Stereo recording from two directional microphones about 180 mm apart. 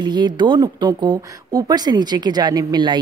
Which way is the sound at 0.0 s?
25° right (ahead or behind).